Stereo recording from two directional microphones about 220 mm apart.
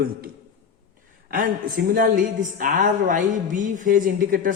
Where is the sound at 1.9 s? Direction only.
35° right (ahead or behind).